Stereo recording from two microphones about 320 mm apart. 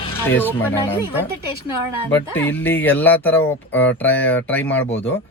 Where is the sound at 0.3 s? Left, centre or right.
Centre.